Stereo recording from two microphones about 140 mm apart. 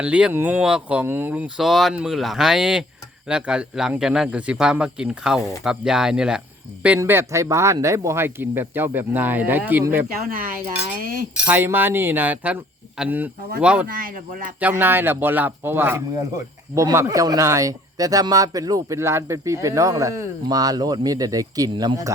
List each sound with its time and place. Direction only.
0.0 s speech: 10° right (ahead or behind)
1.6 s a man's voice: centre (ahead or behind)
7.0 s speech: 20° right (ahead or behind)
11.0 s cutlery: 90° right
11.4 s speech: 15° right (ahead or behind)
13.8 s speech: 90° right
14.6 s speech: 15° right (ahead or behind)